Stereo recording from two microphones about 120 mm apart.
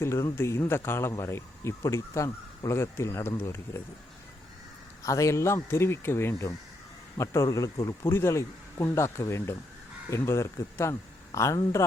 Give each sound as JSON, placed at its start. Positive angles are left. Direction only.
{"t": 0.0, "sound": "speech", "side_deg": 25}
{"t": 5.0, "sound": "speech", "side_deg": 25}